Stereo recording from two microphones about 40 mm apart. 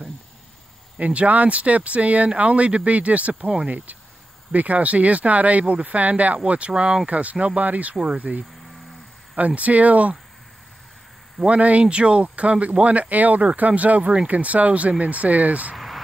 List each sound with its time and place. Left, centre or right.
0.9 s speech: right
3.7 s speech: right
7.1 s speech: right
7.9 s speech: centre
8.2 s speech: right
9.6 s speech: right
11.5 s speech: right
15.7 s vehicle: centre